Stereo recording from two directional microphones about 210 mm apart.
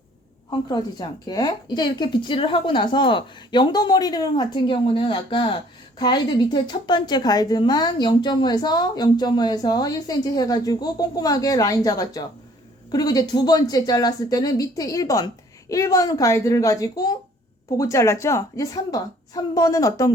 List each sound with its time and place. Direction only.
0.7 s a woman's voice: 20° left (ahead or behind)